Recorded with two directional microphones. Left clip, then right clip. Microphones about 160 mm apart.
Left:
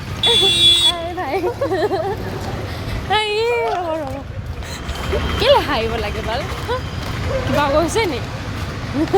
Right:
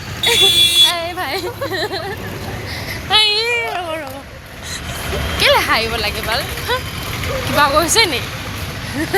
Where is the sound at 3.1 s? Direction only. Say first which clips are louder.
Right 3 dB; 40° left (ahead or behind).